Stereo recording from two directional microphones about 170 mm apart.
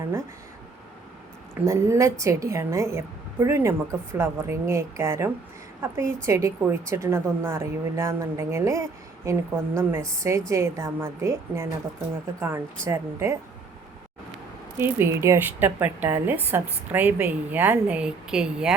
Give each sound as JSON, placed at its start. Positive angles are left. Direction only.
{"t": 1.6, "sound": "a woman's voice", "side_deg": -15}
{"t": 14.8, "sound": "a woman's voice", "side_deg": -15}